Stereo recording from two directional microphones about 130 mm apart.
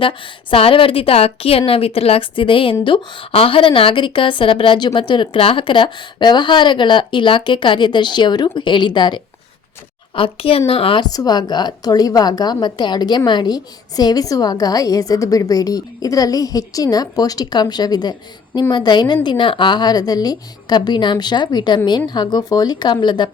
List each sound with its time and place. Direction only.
0.0 s a woman's voice: 45° left (ahead or behind)
10.2 s a woman's voice: 45° left (ahead or behind)
11.1 s a woman's voice: 30° left (ahead or behind)